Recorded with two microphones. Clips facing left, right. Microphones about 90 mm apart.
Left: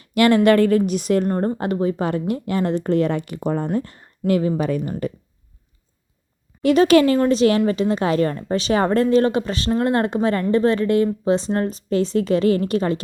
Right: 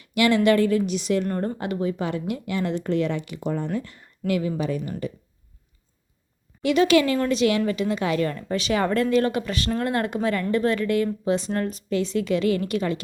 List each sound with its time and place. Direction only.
0.0 s a woman's voice: 45° left (ahead or behind)
1.3 s a woman's voice: 35° left (ahead or behind)
6.6 s a woman's voice: 45° left (ahead or behind)